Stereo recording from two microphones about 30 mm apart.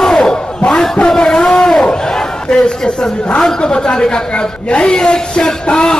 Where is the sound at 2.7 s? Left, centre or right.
Left.